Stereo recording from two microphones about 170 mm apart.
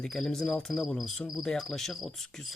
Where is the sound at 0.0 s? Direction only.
5° left (ahead or behind).